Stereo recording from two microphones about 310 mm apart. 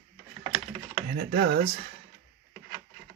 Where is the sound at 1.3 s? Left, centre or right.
Right.